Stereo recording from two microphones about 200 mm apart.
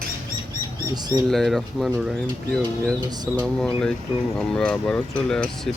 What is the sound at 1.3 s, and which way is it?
Speech, centre (ahead or behind).